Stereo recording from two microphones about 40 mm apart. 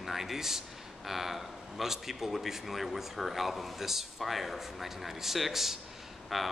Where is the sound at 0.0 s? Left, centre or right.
Centre.